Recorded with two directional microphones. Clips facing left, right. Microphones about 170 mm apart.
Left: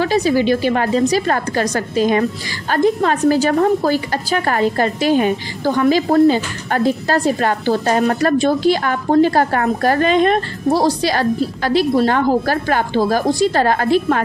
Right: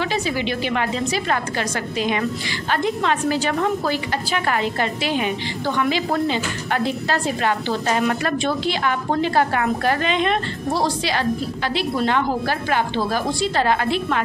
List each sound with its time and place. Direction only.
0.0 s a woman's voice: 40° left (ahead or behind)